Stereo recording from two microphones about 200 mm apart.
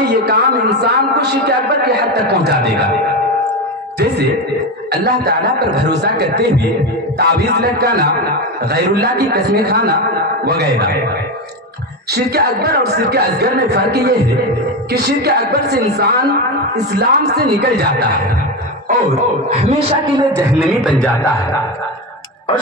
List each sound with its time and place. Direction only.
0.2 s a man's voice: 55° right (ahead or behind)
4.9 s a man's voice: 55° right (ahead or behind)
12.1 s a man's voice: 55° right (ahead or behind)
19.5 s a man's voice: 30° right (ahead or behind)
20.3 s a man's voice: 5° right (ahead or behind)